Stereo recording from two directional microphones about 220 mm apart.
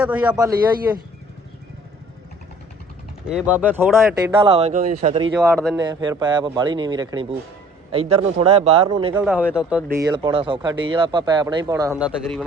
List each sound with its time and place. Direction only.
0.0 s a man's voice: 5° right (ahead or behind)
3.2 s speech: 5° right (ahead or behind)
4.4 s speech: 25° right (ahead or behind)
5.4 s a man's voice: 5° left (ahead or behind)
5.8 s speech: 20° right (ahead or behind)
9.1 s speech: 5° right (ahead or behind)